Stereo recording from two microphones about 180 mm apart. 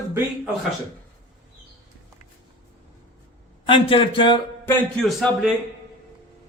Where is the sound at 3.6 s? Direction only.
30° left (ahead or behind).